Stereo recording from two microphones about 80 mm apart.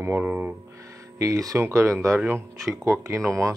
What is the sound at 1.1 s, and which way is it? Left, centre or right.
Speech, right.